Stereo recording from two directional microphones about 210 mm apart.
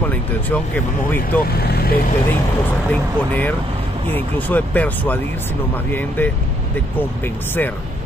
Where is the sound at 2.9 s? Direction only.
10° left (ahead or behind).